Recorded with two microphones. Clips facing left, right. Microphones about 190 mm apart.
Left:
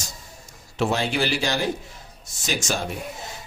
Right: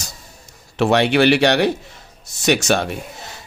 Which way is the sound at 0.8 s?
75° right (ahead or behind).